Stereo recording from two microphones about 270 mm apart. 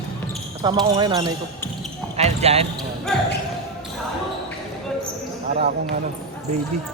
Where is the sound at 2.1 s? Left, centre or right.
Right.